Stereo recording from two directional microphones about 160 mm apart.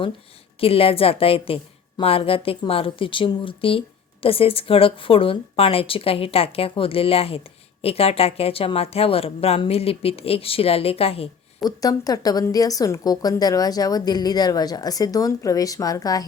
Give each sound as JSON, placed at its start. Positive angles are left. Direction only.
{"t": 0.6, "sound": "speech", "side_deg": 35}
{"t": 11.6, "sound": "a woman's voice", "side_deg": 25}